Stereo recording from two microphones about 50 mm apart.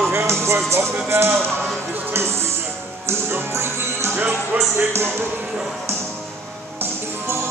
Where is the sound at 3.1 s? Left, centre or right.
Right.